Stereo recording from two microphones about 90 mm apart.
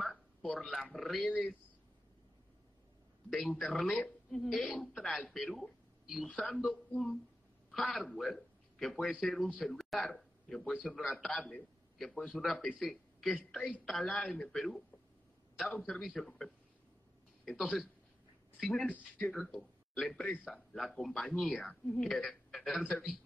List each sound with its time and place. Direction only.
0.0 s a sound: centre (ahead or behind)
0.5 s a man's voice: 5° left (ahead or behind)
1.2 s a man's voice: 15° left (ahead or behind)
3.3 s a man's voice: 5° left (ahead or behind)
14.3 s a man's voice: 15° left (ahead or behind)
15.5 s a man's voice: centre (ahead or behind)
19.1 s a man's voice: 15° left (ahead or behind)
19.5 s a man's voice: 5° left (ahead or behind)